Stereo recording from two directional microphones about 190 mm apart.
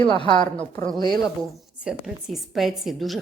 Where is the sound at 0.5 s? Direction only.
5° left (ahead or behind).